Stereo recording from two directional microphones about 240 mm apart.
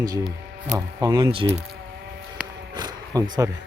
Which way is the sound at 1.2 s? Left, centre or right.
Right.